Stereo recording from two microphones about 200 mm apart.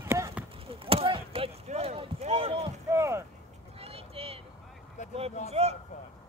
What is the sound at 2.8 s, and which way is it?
Speech, 15° right (ahead or behind).